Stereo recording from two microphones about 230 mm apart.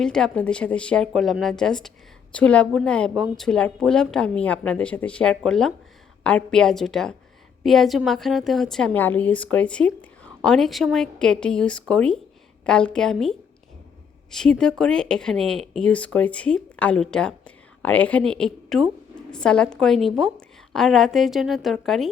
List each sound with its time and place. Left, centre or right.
0.0 s speech: centre